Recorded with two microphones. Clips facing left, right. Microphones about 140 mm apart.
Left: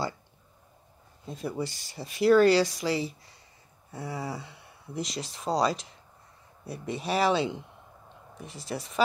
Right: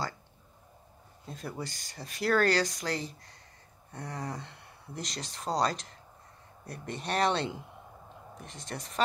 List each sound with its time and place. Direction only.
1.2 s speech: centre (ahead or behind)
1.6 s speech: 45° right (ahead or behind)
2.0 s speech: 5° left (ahead or behind)